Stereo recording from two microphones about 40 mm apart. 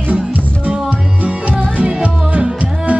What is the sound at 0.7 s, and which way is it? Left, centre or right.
Music, right.